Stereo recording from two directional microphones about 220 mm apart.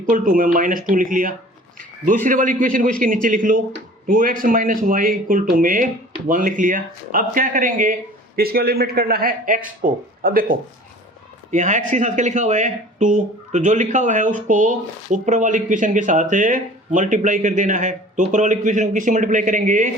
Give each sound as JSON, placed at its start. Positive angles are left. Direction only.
{"t": 0.0, "sound": "a man's voice", "side_deg": -35}